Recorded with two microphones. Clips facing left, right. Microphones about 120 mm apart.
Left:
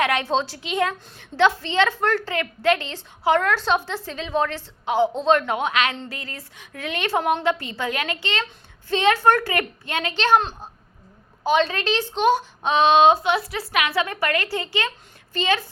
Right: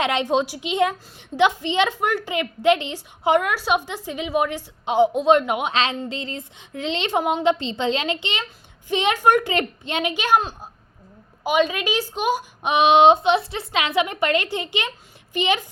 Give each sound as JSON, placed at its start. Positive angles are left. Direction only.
{"t": 0.0, "sound": "a woman's voice", "side_deg": -20}